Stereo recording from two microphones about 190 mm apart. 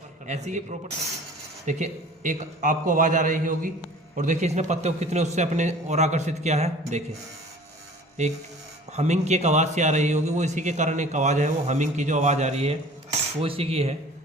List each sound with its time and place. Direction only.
0.3 s a man's voice: 35° right (ahead or behind)
8.2 s a man's voice: 35° right (ahead or behind)